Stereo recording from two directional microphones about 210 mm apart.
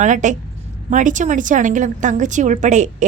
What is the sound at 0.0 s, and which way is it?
A woman's voice, 35° right (ahead or behind).